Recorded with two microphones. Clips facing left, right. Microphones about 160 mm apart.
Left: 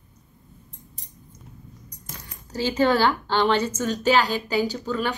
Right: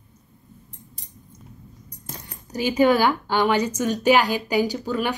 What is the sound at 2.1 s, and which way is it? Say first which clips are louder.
Speech: right 1 dB; 15° right (ahead or behind).